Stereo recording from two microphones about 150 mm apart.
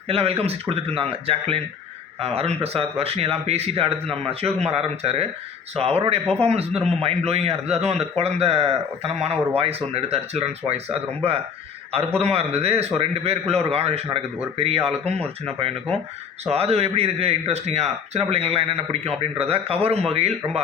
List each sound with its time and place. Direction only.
0.1 s a man's voice: 40° right (ahead or behind)